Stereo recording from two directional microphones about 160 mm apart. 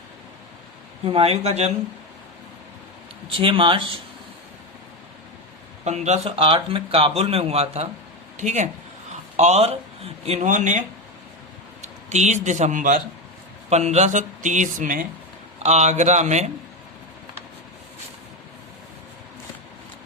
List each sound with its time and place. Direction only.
1.0 s speech: 35° right (ahead or behind)
3.3 s speech: 30° right (ahead or behind)
5.8 s a man's voice: 45° right (ahead or behind)
15.6 s speech: 45° right (ahead or behind)